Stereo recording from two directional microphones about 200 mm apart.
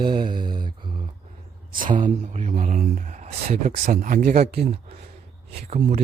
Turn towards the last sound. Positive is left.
turn(degrees=-35)  # may be behind; listen again after turning